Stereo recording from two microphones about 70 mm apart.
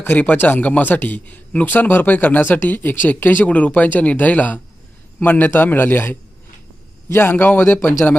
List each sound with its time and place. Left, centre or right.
0.0 s a man's voice: left